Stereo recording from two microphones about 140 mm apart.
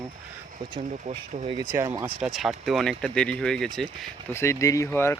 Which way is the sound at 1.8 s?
20° right (ahead or behind).